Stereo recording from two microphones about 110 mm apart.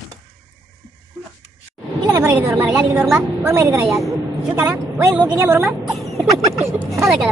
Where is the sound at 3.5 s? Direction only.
30° right (ahead or behind).